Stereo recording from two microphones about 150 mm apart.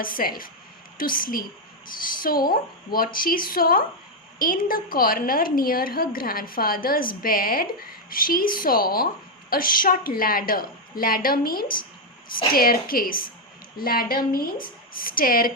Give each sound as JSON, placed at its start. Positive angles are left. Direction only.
{"t": 0.0, "sound": "a woman's voice", "side_deg": 70}